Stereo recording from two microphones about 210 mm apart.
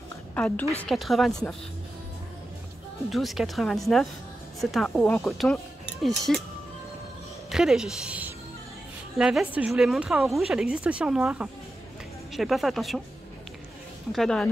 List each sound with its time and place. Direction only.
0.3 s a woman's voice: 10° left (ahead or behind)
3.1 s a woman's voice: centre (ahead or behind)
7.4 s a woman's voice: centre (ahead or behind)
14.1 s a woman's voice: 5° left (ahead or behind)